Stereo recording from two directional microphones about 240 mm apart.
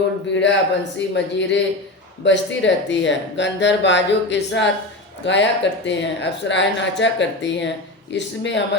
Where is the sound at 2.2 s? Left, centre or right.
Left.